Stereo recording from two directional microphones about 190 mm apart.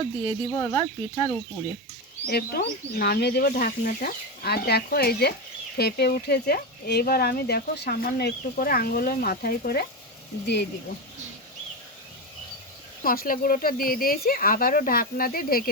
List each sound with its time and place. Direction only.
0.5 s speech: 20° left (ahead or behind)
2.3 s speech: 55° left (ahead or behind)
13.0 s speech: 50° left (ahead or behind)